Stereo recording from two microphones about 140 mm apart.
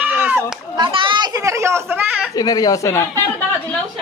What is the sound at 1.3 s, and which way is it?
Speech, 20° right (ahead or behind).